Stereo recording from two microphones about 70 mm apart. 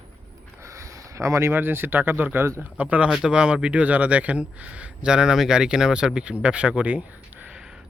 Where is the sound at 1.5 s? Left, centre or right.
Right; by 7.0 s centre.